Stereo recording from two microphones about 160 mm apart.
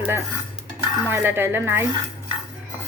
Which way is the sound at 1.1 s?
15° right (ahead or behind).